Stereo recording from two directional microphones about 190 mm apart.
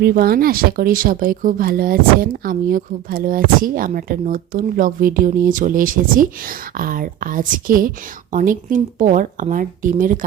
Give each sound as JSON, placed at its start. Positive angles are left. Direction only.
{"t": 0.0, "sound": "speech", "side_deg": -50}